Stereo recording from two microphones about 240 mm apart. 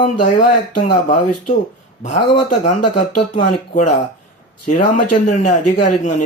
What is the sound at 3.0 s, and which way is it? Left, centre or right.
Speech, left.